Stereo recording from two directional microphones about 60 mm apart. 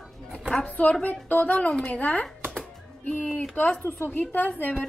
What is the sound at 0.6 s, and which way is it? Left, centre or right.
Speech, left.